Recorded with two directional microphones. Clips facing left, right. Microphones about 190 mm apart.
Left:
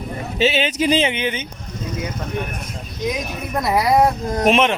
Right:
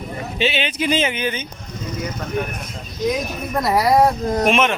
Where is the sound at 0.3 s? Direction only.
40° left (ahead or behind); by 1.5 s 20° left (ahead or behind).